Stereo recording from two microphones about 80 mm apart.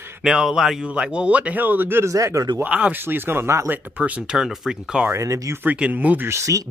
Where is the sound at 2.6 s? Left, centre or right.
Centre.